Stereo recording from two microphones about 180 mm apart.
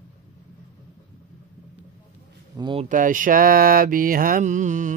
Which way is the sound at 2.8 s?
45° right (ahead or behind).